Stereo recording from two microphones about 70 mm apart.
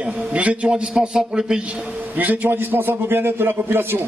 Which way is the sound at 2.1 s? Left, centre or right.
Right.